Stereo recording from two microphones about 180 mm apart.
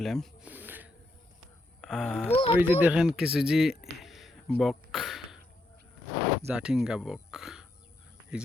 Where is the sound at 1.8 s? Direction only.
Centre (ahead or behind).